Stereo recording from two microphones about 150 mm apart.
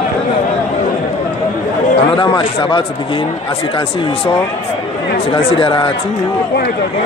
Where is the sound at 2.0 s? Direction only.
35° left (ahead or behind).